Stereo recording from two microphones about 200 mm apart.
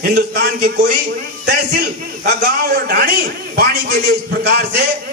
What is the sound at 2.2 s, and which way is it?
A man's voice, 50° right (ahead or behind).